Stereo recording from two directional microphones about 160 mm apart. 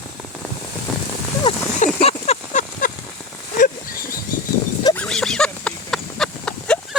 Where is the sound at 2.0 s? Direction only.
40° left (ahead or behind).